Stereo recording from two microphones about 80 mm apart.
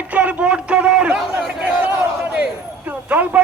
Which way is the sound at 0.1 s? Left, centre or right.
Centre.